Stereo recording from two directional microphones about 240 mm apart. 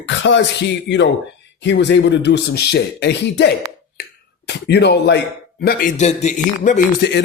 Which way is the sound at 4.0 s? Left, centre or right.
Left.